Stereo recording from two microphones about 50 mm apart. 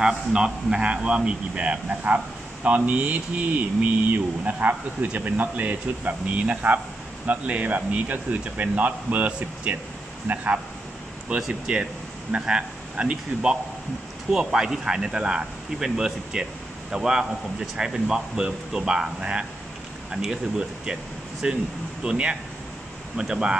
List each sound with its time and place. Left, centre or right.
0.0 s a man's voice: centre; by 10.6 s right
11.4 s a man's voice: centre